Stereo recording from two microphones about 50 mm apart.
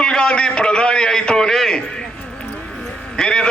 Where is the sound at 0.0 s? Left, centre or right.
Centre.